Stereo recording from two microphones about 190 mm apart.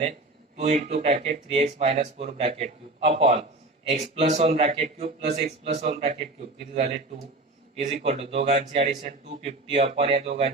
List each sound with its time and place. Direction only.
0.0 s speech: 35° right (ahead or behind)